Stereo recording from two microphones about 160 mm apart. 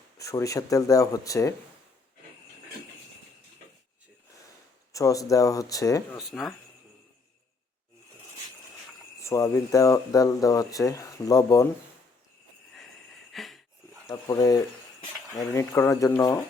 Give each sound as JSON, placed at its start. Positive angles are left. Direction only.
{"t": 0.2, "sound": "speech", "side_deg": 20}
{"t": 4.9, "sound": "speech", "side_deg": 20}
{"t": 9.2, "sound": "speech", "side_deg": 20}
{"t": 12.7, "sound": "a sound", "side_deg": 0}
{"t": 14.1, "sound": "speech", "side_deg": 20}